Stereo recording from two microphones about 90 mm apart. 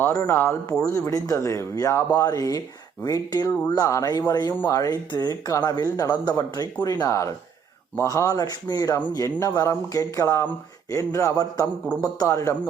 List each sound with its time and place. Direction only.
0.0 s speech: 30° left (ahead or behind)
2.0 s speech: 45° left (ahead or behind)
7.0 s speech: 35° left (ahead or behind)
10.2 s speech: 25° left (ahead or behind)